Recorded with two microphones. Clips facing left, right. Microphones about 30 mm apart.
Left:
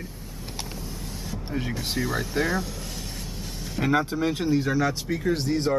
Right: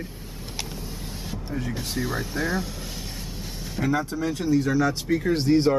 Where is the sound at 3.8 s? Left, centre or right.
Left.